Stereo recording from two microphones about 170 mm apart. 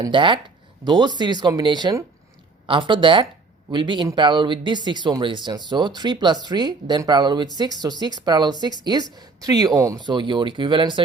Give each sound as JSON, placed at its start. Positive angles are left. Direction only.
{"t": 0.0, "sound": "speech", "side_deg": -30}